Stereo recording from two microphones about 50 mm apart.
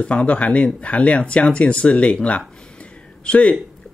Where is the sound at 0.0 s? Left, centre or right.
Left.